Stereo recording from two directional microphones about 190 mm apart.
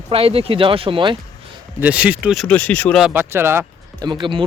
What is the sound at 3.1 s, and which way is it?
Speech, 10° right (ahead or behind).